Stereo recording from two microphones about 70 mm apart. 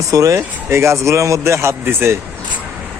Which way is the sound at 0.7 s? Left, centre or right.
Right.